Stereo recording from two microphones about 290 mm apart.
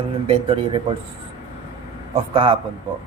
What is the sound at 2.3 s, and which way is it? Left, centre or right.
Speech, centre.